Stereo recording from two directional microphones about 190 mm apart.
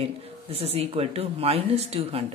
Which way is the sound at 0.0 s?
30° right (ahead or behind).